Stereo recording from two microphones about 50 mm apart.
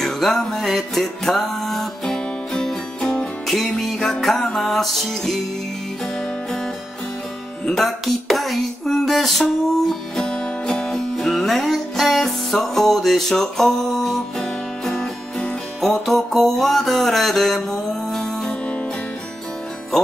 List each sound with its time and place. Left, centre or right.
0.0 s music: centre
7.8 s music: centre